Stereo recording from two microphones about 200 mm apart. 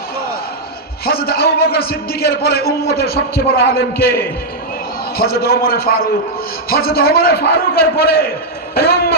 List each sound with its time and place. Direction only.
1.0 s a man's voice: 50° left (ahead or behind)
5.1 s a man's voice: 50° left (ahead or behind)